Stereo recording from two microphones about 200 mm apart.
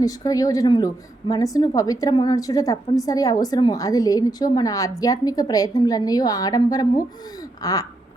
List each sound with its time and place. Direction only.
0.0 s a woman's voice: 15° left (ahead or behind)